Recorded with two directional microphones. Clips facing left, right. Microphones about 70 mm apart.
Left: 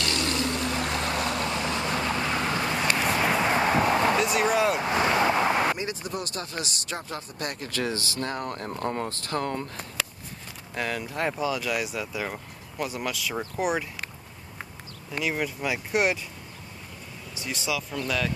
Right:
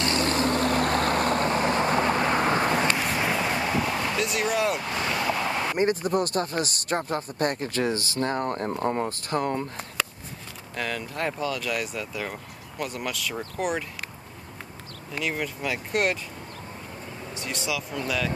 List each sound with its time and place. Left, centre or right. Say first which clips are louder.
0.0 s vehicle: right 4 dB; right
2.9 s a sound: left 1 dB; centre
3.3 s a sound: left 3 dB; left
4.2 s a sound: left 2 dB; centre
4.7 s vehicle: left 5 dB; left
5.8 s speech: right 9 dB; right; by 9.8 s centre
10.8 s speech: left 1 dB; centre
15.1 s speech: left 1 dB; centre
17.3 s speech: even; centre